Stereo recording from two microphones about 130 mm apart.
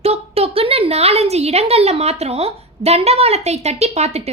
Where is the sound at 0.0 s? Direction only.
50° right (ahead or behind).